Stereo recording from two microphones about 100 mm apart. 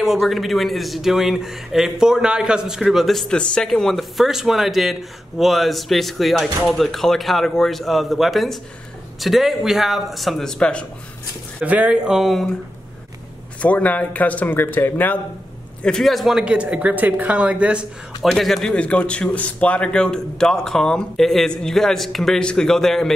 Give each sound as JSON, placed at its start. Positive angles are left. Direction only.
{"t": 0.0, "sound": "a man's voice", "side_deg": 0}
{"t": 11.6, "sound": "speech", "side_deg": -15}
{"t": 13.6, "sound": "speech", "side_deg": 15}
{"t": 15.8, "sound": "speech", "side_deg": 5}
{"t": 18.2, "sound": "a man's voice", "side_deg": 0}